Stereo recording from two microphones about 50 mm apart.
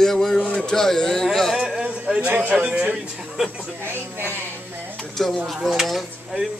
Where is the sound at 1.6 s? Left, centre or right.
Centre.